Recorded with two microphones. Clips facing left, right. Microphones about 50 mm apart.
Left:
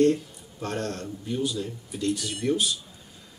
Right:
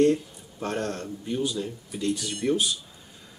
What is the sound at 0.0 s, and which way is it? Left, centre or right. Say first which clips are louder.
Speech: even; centre.